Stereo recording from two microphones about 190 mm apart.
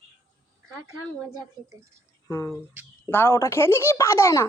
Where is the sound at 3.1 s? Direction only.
10° left (ahead or behind).